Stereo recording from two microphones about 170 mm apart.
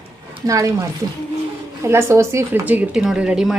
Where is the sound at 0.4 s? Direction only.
20° right (ahead or behind).